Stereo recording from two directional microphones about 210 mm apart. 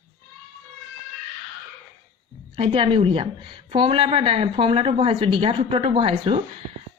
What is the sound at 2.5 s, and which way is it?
Speech, 25° right (ahead or behind).